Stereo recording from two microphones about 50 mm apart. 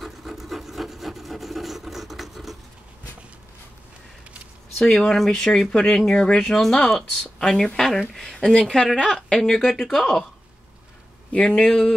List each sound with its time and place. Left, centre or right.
0.0 s wood: centre
4.7 s speech: centre
11.5 s speech: centre